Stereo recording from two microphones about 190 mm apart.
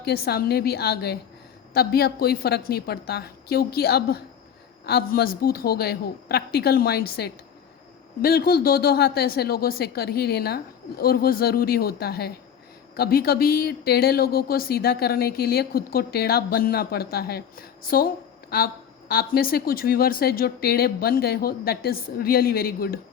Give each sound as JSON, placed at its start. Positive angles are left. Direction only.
{"t": 0.0, "sound": "a woman's voice", "side_deg": 55}